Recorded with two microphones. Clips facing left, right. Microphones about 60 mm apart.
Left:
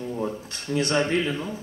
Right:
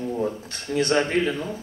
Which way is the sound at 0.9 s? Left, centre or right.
Right.